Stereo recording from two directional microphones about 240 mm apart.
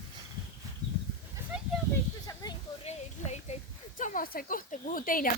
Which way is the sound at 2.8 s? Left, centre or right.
Left.